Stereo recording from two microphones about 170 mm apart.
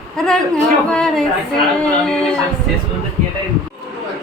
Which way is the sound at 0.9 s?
5° left (ahead or behind).